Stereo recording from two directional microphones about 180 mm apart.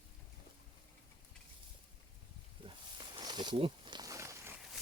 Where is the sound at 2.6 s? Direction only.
25° right (ahead or behind).